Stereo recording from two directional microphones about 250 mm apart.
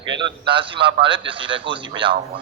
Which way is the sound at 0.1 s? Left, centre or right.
Centre.